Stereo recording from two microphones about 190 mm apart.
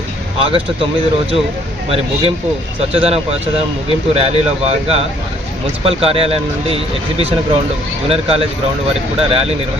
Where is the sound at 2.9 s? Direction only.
30° right (ahead or behind).